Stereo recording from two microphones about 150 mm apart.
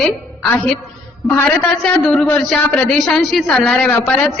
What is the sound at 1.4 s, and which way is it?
A man's voice, 5° left (ahead or behind).